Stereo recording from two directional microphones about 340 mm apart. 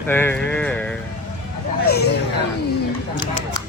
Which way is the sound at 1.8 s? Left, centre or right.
Left.